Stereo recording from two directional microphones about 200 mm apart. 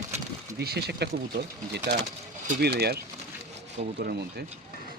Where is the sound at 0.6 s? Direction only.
55° right (ahead or behind).